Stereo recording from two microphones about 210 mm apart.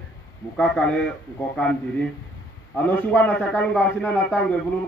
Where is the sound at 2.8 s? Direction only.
10° left (ahead or behind).